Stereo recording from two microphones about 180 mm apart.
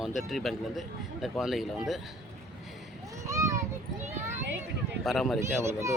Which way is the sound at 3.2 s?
15° right (ahead or behind).